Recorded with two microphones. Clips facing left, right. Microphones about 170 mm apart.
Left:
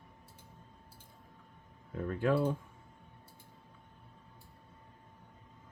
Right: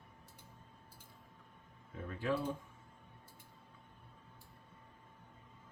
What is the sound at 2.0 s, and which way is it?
Speech, 55° left (ahead or behind).